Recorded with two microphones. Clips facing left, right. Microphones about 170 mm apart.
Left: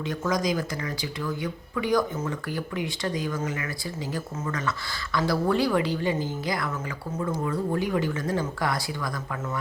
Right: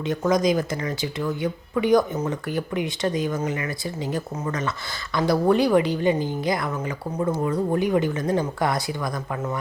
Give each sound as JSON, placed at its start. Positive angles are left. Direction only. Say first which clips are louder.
{"t": 0.1, "sound": "a woman's voice", "louder": "right 6 dB", "side_deg": -20}
{"t": 5.1, "sound": "a woman's voice", "louder": "right 5 dB", "side_deg": -20}